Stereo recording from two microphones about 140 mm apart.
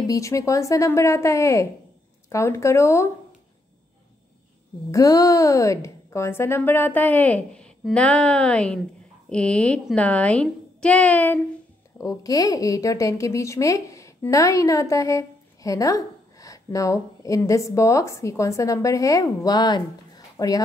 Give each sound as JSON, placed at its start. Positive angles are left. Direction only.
{"t": 0.0, "sound": "speech", "side_deg": 25}
{"t": 4.9, "sound": "a woman's voice", "side_deg": 25}
{"t": 12.0, "sound": "speech", "side_deg": 25}